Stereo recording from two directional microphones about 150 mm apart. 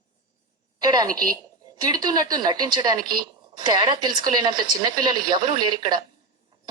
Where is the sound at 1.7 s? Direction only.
25° right (ahead or behind).